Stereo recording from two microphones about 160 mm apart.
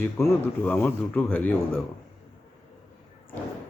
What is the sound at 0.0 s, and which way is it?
A man's voice, 15° left (ahead or behind).